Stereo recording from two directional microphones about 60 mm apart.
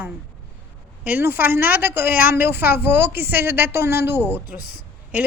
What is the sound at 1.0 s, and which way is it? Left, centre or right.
A woman's voice, right.